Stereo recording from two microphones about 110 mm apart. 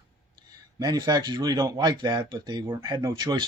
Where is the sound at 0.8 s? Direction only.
40° right (ahead or behind).